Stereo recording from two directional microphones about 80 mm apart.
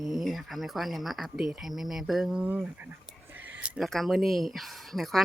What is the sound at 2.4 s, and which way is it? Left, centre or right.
Speech, centre.